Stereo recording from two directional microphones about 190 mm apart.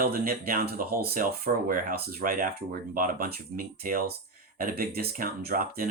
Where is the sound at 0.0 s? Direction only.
50° right (ahead or behind).